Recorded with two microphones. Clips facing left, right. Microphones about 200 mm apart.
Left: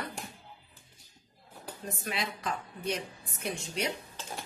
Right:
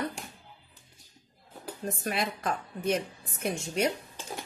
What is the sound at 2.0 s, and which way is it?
A woman's voice, 50° right (ahead or behind).